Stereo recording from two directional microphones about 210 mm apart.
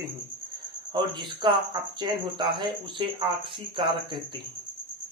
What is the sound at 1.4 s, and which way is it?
Speech, 20° right (ahead or behind).